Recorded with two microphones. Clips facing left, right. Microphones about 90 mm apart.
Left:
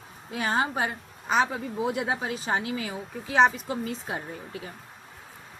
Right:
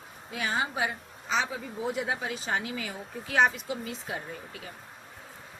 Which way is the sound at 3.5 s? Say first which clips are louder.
Left 4 dB; 40° left (ahead or behind).